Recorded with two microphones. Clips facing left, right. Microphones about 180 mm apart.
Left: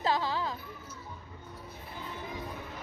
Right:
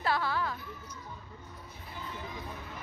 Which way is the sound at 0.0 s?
20° left (ahead or behind).